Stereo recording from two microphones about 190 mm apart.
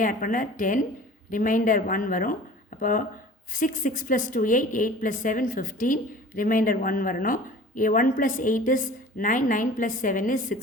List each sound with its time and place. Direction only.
0.0 s a woman's voice: 45° left (ahead or behind)